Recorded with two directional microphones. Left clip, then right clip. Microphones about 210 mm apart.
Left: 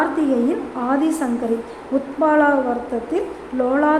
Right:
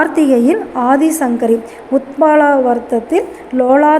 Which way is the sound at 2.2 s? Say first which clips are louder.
Right 6 dB; 20° right (ahead or behind).